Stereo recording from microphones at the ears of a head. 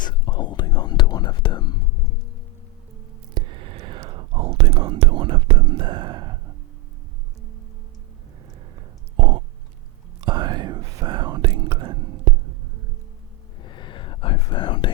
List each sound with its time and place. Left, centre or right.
0.0 s whispering: left
3.3 s whispering: right
10.2 s whispering: right
13.6 s whispering: left